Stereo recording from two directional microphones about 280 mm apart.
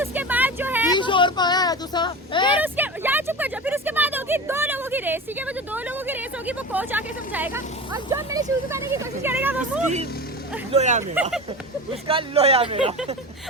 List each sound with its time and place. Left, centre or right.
0.0 s vehicle: centre
0.9 s a sound: centre
2.6 s a sound: centre
9.2 s speech: centre
10.7 s speech: right
11.1 s speech: centre
12.0 s speech: right